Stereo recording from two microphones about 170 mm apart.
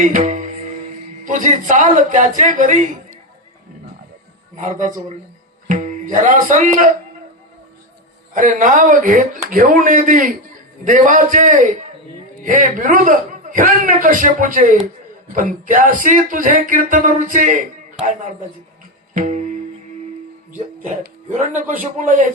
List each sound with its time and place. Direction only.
0.0 s music: 45° right (ahead or behind)
1.2 s a man's voice: 50° right (ahead or behind)
4.5 s a man's voice: 45° right (ahead or behind)
8.3 s a man's voice: 50° right (ahead or behind)
19.1 s music: 50° right (ahead or behind)
20.8 s a man's voice: 50° right (ahead or behind)